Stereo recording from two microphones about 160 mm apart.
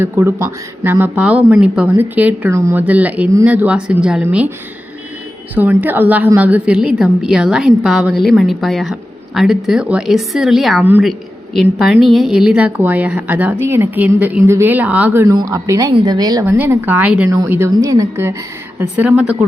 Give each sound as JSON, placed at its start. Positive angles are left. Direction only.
{"t": 0.0, "sound": "a woman's voice", "side_deg": -15}
{"t": 5.5, "sound": "a woman's voice", "side_deg": -10}
{"t": 16.5, "sound": "a woman's voice", "side_deg": -15}